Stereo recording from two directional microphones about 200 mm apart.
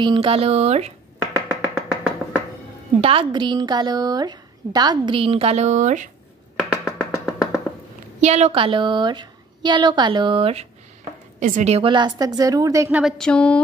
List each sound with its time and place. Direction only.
0.0 s a woman's voice: 25° right (ahead or behind)
1.3 s finger snapping: 5° right (ahead or behind)
3.0 s a woman's voice: 25° right (ahead or behind)
6.8 s music: 10° left (ahead or behind)
8.2 s a woman's voice: 35° right (ahead or behind); by 13.0 s 15° right (ahead or behind)
13.0 s a sound: 5° left (ahead or behind)